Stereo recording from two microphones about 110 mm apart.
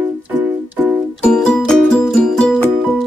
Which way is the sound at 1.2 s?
5° left (ahead or behind).